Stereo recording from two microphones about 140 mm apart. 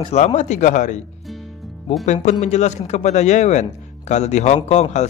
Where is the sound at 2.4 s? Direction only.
55° left (ahead or behind).